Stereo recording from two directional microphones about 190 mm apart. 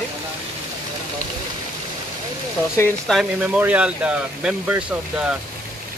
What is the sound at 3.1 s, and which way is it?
Speech, centre (ahead or behind).